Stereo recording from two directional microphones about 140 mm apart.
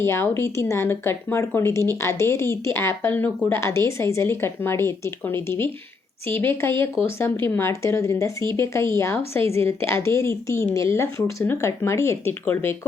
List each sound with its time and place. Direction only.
0.0 s speech: 15° left (ahead or behind)